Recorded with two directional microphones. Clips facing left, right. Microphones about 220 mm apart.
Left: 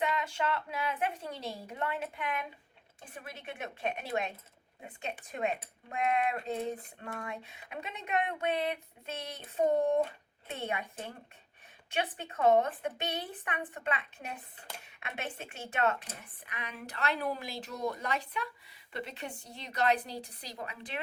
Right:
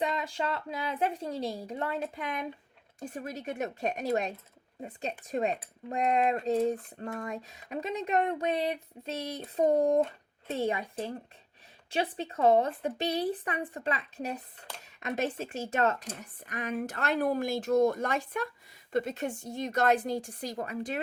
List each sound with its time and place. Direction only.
0.2 s a woman's voice: 35° right (ahead or behind)